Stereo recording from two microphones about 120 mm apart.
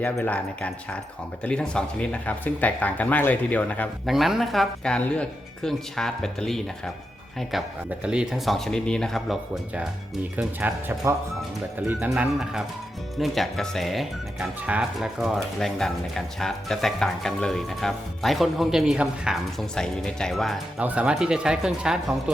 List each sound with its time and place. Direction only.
0.3 s speech: 10° left (ahead or behind)
4.0 s speech: centre (ahead or behind)
10.3 s speech: 15° right (ahead or behind); by 20.8 s centre (ahead or behind)
20.8 s speech: 10° right (ahead or behind)